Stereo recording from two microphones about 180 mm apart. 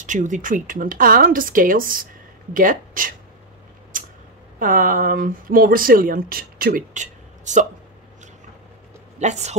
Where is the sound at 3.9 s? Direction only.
50° right (ahead or behind).